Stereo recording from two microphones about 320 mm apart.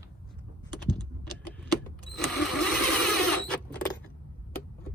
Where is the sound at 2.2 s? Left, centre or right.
Centre.